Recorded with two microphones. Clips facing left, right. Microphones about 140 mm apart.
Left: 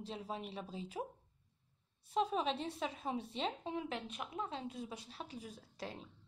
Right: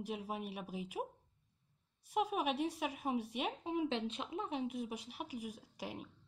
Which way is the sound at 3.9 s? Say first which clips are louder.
Right 4 dB; 25° right (ahead or behind).